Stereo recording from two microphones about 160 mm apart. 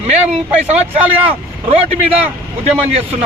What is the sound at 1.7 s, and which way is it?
Speech, 40° right (ahead or behind).